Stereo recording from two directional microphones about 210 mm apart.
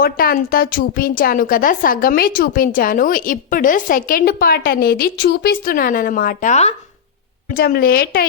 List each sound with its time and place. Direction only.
0.0 s a woman's voice: 45° left (ahead or behind)
7.5 s a woman's voice: 45° left (ahead or behind)